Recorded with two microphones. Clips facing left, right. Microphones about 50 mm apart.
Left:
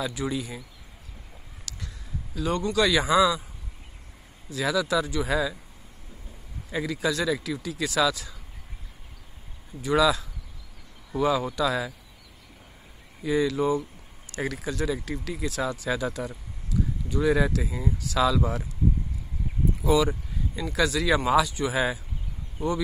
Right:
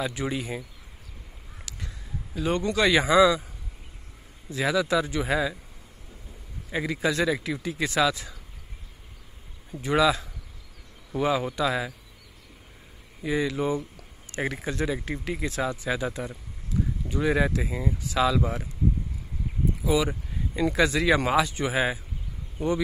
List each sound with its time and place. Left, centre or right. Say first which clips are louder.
0.0 s speech: even; right
1.7 s a sound: left 1 dB; right
2.3 s a man's voice: even; right
3.1 s speech: right 4 dB; centre
4.5 s speech: right 1 dB; right
6.7 s speech: right 1 dB; right
9.8 s speech: even; right
13.2 s speech: left 2 dB; right
19.8 s speech: left 3 dB; centre
20.7 s speech: even; right